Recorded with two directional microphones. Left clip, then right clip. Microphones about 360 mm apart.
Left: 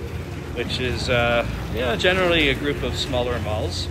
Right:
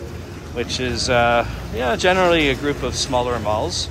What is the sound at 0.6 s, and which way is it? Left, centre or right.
Speech, centre.